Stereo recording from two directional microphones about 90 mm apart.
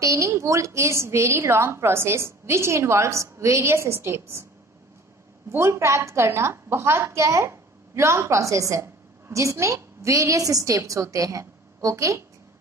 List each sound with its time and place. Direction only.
0.0 s a woman's voice: 35° right (ahead or behind)
5.5 s a woman's voice: 30° right (ahead or behind)